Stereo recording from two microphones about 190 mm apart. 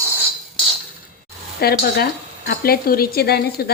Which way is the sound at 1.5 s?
55° left (ahead or behind).